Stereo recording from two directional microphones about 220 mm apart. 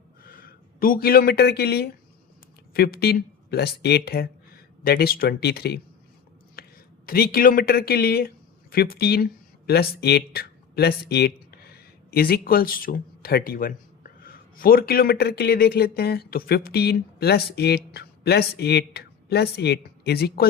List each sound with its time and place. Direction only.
0.3 s speech: 40° left (ahead or behind)